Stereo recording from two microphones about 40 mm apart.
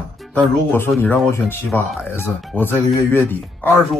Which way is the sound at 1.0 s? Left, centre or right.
Left.